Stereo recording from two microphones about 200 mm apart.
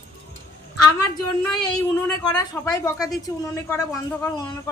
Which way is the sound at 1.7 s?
20° left (ahead or behind).